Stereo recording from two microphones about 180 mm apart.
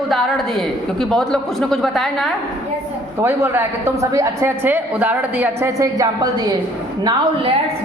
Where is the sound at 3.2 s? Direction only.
10° right (ahead or behind).